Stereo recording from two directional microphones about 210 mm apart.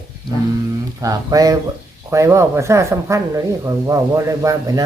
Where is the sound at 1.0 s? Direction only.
15° right (ahead or behind).